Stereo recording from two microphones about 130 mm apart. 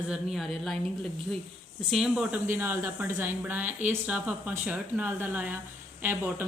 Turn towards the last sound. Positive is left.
turn(degrees=-15)  # may be behind; listen again after turning